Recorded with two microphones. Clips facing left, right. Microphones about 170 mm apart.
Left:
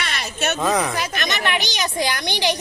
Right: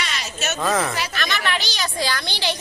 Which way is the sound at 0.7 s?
15° left (ahead or behind).